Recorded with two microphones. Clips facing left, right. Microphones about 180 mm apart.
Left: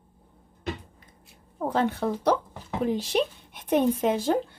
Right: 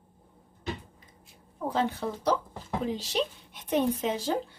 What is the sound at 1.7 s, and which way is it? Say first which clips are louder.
Speech: left 4 dB; 55° left (ahead or behind).